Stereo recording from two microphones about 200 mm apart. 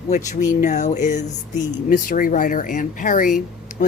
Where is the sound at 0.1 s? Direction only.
35° left (ahead or behind).